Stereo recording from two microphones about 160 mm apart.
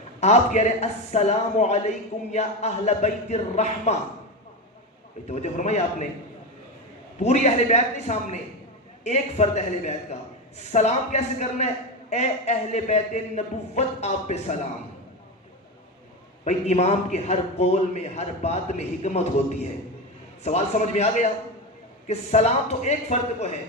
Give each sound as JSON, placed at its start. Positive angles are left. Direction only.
{"t": 0.2, "sound": "a man's voice", "side_deg": 45}
{"t": 5.3, "sound": "a man's voice", "side_deg": 45}
{"t": 7.2, "sound": "a man's voice", "side_deg": 45}
{"t": 16.4, "sound": "a man's voice", "side_deg": 45}
{"t": 20.4, "sound": "a man's voice", "side_deg": 45}